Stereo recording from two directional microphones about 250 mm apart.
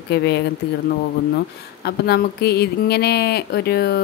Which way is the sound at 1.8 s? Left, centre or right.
Left.